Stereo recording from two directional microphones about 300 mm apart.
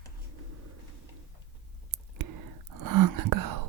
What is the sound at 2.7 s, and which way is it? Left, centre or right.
Whispering, right.